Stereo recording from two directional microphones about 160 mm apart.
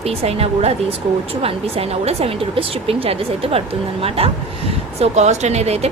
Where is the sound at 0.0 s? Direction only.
40° right (ahead or behind).